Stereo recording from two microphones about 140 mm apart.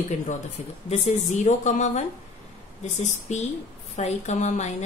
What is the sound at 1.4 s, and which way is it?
Speech, 60° left (ahead or behind).